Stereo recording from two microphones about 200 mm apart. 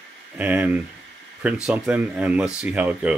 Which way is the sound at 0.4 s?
10° right (ahead or behind).